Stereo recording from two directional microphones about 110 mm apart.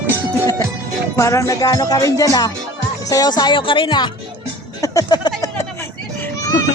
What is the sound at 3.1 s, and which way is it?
Speech, 35° left (ahead or behind).